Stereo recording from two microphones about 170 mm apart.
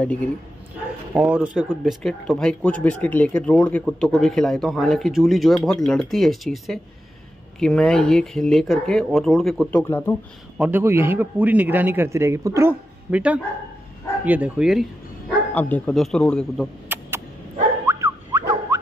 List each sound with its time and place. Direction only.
0.0 s a man's voice: 10° left (ahead or behind)
1.1 s a man's voice: 10° right (ahead or behind)
2.0 s speech: 5° left (ahead or behind)
10.6 s a man's voice: 15° right (ahead or behind)
15.5 s speech: 10° left (ahead or behind)
16.9 s a sound: 10° right (ahead or behind)